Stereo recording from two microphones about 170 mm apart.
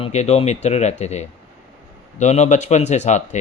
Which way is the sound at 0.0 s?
40° left (ahead or behind).